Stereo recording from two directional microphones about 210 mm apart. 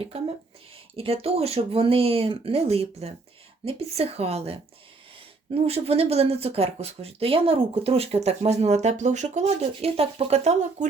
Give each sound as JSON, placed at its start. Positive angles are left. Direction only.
{"t": 0.1, "sound": "speech", "side_deg": -30}